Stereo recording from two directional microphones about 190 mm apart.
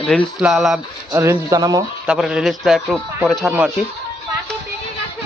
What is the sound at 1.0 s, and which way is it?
Speech, 15° right (ahead or behind).